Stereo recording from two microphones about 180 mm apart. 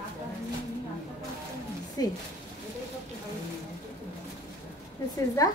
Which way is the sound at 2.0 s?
20° left (ahead or behind).